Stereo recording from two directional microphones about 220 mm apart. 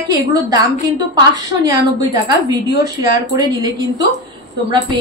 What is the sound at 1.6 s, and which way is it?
A woman's voice, 15° right (ahead or behind).